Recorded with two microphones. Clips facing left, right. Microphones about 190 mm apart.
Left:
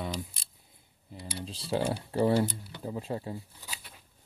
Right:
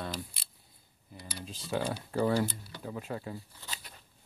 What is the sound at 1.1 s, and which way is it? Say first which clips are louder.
Speech: left 4 dB; 30° left (ahead or behind).